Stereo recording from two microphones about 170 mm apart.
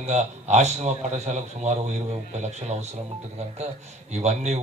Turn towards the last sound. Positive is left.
turn(degrees=-40)  # may be behind; listen again after turning